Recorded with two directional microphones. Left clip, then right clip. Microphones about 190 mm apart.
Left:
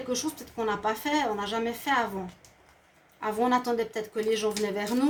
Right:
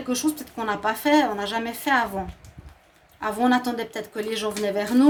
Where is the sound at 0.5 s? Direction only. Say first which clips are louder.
Left 1 dB; 50° right (ahead or behind).